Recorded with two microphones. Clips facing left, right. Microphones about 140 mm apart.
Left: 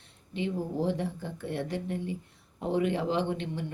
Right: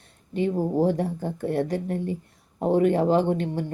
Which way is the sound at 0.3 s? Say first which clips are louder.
Right 8 dB; 45° right (ahead or behind).